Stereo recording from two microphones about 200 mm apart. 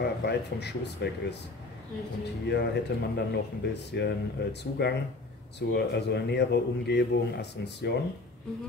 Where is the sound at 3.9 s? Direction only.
55° left (ahead or behind).